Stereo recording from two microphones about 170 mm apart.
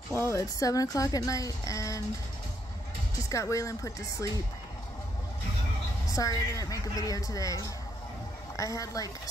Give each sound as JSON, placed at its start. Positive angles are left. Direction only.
{"t": 0.1, "sound": "speech", "side_deg": 15}
{"t": 3.2, "sound": "speech", "side_deg": 20}
{"t": 6.0, "sound": "speech", "side_deg": 20}